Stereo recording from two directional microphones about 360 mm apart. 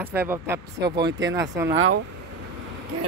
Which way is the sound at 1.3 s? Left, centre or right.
Centre.